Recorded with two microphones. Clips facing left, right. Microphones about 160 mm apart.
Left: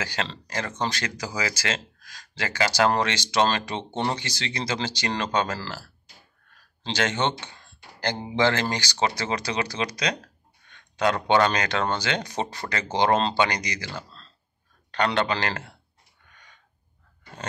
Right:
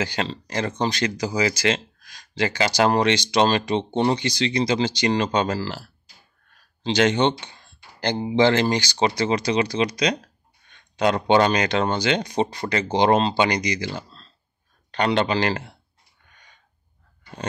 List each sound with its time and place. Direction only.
0.0 s speech: 20° right (ahead or behind)